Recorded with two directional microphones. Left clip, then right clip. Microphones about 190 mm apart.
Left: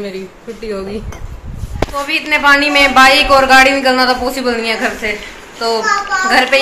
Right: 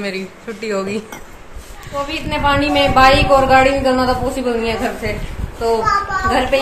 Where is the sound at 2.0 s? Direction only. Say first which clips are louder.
Left 6 dB; 5° left (ahead or behind).